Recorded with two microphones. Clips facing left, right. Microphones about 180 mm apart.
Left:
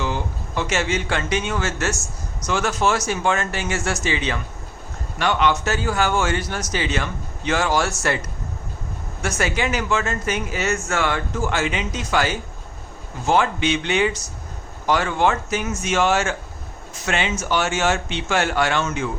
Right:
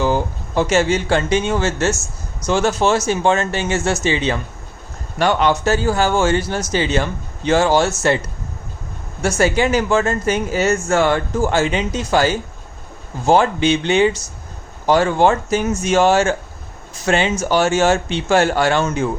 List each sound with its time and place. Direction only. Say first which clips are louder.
0.0 s speech: right 7 dB; 40° right (ahead or behind)
9.4 s speech: right 7 dB; 35° right (ahead or behind)